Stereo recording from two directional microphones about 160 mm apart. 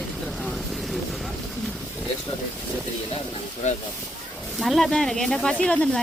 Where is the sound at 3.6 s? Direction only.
45° left (ahead or behind).